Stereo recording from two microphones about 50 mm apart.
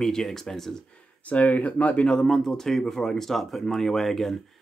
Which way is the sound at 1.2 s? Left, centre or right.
Left.